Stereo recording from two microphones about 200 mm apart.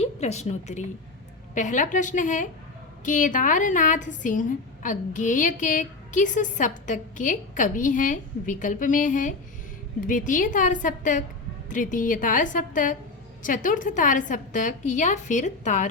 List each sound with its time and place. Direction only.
0.0 s a woman's voice: 35° left (ahead or behind)